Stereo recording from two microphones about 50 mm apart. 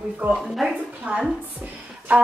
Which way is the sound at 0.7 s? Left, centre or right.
Right.